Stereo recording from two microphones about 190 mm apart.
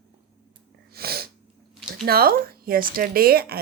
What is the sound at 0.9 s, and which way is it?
Speech, 55° right (ahead or behind).